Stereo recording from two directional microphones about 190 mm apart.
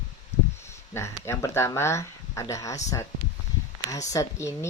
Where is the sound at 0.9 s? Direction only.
15° left (ahead or behind).